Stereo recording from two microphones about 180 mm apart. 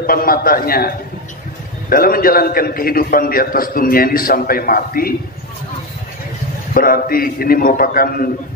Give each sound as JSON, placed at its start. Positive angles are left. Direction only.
{"t": 0.0, "sound": "a man's voice", "side_deg": 55}
{"t": 6.7, "sound": "a man's voice", "side_deg": 55}